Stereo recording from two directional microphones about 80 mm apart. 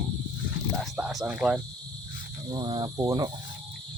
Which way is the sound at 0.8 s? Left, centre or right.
Centre.